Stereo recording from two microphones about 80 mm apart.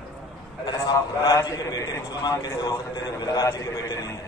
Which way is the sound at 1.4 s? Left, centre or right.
Left.